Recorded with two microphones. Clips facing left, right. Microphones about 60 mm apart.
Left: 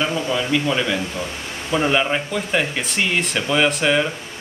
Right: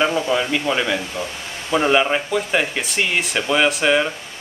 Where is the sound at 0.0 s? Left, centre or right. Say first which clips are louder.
Right 3 dB; right.